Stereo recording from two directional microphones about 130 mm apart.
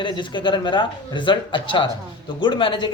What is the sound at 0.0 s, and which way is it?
A man's voice, 40° left (ahead or behind).